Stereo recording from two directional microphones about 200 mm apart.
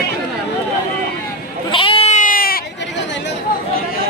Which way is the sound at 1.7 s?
25° left (ahead or behind).